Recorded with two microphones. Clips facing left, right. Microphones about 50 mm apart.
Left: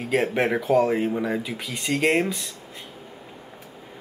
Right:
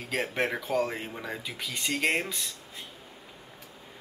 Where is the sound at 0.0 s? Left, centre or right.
Centre.